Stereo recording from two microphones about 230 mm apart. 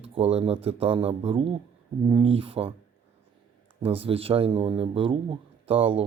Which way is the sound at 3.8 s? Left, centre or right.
Right.